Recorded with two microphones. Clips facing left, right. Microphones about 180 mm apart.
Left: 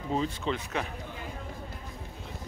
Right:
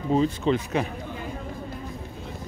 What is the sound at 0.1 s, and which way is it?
Speech, 30° right (ahead or behind).